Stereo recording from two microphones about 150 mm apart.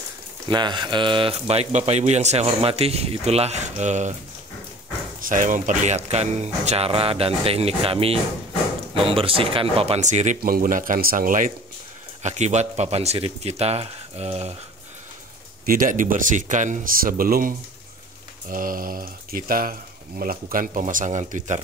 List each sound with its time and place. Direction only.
0.5 s speech: 30° right (ahead or behind); by 4.1 s 50° right (ahead or behind)
5.2 s speech: 60° right (ahead or behind)
10.4 s speech: 70° right (ahead or behind)
12.2 s speech: 50° right (ahead or behind)
15.6 s speech: 65° right (ahead or behind)